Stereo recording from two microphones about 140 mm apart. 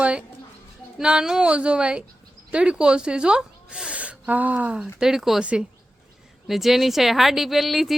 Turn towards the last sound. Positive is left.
turn(degrees=0)  # may be behind; listen again after turning